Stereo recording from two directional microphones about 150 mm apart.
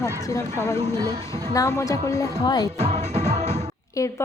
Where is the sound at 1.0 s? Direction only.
25° right (ahead or behind).